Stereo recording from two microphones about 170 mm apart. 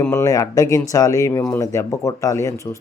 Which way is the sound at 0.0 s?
15° left (ahead or behind).